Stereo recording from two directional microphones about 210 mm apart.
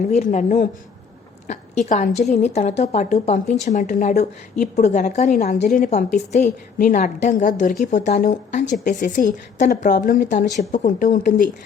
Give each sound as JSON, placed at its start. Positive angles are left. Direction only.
{"t": 0.1, "sound": "a woman's voice", "side_deg": 35}